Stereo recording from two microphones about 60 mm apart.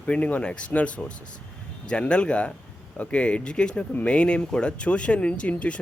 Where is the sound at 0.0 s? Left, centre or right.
Left.